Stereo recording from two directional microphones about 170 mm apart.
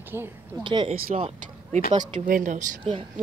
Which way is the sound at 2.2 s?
50° right (ahead or behind).